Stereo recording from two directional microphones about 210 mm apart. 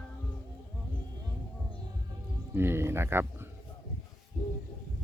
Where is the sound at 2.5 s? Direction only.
10° right (ahead or behind).